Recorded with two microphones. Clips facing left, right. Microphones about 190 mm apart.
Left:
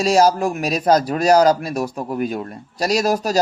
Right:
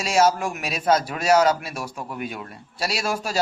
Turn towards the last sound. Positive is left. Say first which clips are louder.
# left 8 dB
turn(degrees=40)  # may be behind; listen again after turning